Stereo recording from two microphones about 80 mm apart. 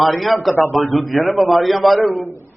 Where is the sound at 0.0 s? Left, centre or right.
Centre.